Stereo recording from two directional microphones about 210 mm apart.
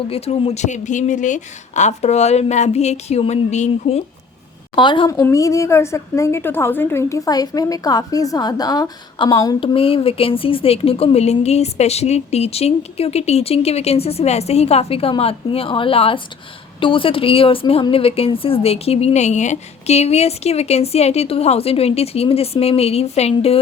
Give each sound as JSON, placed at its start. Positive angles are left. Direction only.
{"t": 0.1, "sound": "a woman's voice", "side_deg": 30}